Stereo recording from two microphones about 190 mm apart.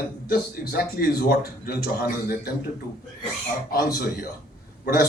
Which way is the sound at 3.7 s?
50° left (ahead or behind).